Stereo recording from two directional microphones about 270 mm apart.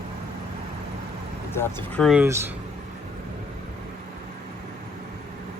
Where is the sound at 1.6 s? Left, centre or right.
Centre.